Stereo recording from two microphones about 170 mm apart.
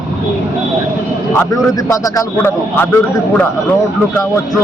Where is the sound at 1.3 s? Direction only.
20° left (ahead or behind).